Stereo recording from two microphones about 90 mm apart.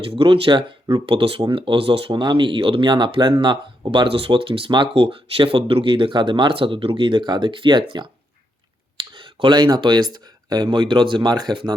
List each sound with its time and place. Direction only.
0.0 s speech: 75° right (ahead or behind)
11.3 s speech: 55° right (ahead or behind)